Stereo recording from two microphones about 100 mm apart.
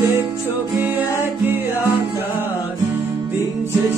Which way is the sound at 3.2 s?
25° right (ahead or behind).